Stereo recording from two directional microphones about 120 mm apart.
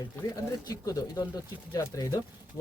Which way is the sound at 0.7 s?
30° left (ahead or behind).